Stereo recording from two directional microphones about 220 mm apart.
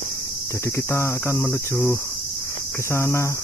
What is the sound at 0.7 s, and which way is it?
Cricket, 10° left (ahead or behind).